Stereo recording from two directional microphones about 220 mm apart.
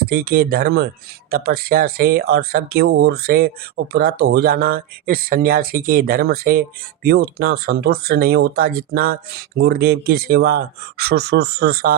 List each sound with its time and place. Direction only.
0.0 s speech: 40° right (ahead or behind)